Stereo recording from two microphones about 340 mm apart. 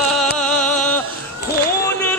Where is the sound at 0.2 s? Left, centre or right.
Centre.